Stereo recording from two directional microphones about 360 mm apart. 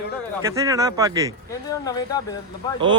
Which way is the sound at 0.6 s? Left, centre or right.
Centre.